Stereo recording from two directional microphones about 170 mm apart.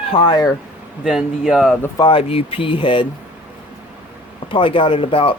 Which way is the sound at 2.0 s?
30° left (ahead or behind).